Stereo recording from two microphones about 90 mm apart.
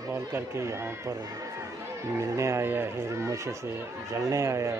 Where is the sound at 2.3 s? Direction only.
35° right (ahead or behind).